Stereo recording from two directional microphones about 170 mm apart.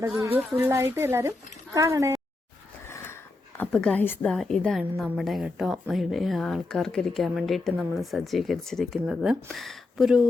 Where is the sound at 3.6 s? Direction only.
5° left (ahead or behind).